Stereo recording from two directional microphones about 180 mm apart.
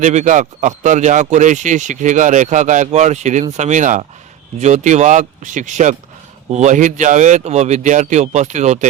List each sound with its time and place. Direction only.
0.0 s speech: 40° right (ahead or behind)